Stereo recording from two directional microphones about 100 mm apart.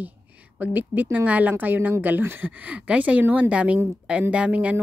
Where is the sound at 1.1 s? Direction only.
15° right (ahead or behind).